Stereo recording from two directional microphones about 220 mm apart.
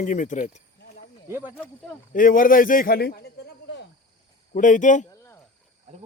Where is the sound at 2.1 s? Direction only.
40° left (ahead or behind).